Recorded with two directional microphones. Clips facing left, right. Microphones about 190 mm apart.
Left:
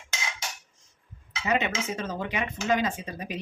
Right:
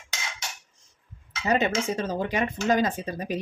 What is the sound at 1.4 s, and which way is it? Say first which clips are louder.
Speech: right 3 dB; 35° right (ahead or behind).